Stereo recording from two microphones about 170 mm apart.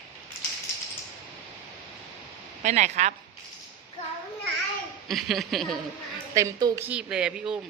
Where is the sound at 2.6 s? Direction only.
45° right (ahead or behind).